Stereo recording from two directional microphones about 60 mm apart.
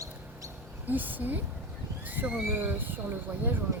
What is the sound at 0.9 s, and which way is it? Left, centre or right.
Speech, right.